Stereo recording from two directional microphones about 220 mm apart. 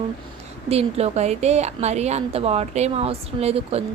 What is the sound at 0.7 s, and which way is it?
A woman's voice, 30° right (ahead or behind).